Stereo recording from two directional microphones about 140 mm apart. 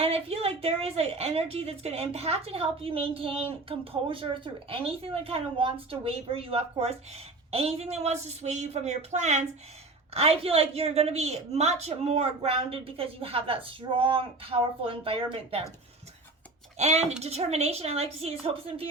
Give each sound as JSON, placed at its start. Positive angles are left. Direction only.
{"t": 0.0, "sound": "a woman's voice", "side_deg": -45}
{"t": 10.2, "sound": "a woman's voice", "side_deg": -45}
{"t": 16.7, "sound": "a woman's voice", "side_deg": -50}